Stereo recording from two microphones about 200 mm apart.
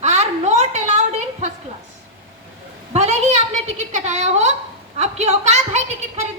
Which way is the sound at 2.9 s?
30° right (ahead or behind).